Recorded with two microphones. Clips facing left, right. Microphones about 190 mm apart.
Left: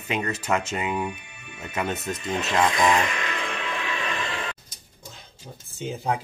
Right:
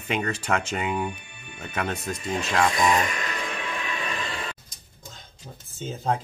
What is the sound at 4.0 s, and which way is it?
Music, 45° right (ahead or behind).